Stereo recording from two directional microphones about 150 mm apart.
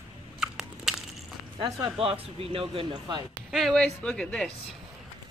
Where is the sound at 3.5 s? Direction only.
Centre (ahead or behind).